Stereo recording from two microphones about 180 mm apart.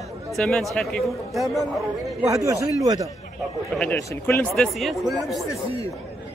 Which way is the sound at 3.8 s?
10° left (ahead or behind).